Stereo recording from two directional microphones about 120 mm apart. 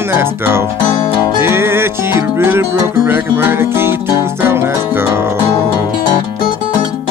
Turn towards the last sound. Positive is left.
turn(degrees=-20)  # may be behind; listen again after turning